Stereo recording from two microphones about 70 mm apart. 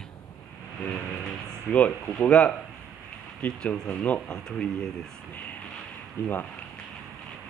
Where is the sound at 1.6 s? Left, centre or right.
Left.